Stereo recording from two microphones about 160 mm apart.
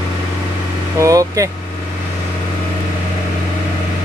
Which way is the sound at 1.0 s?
20° right (ahead or behind).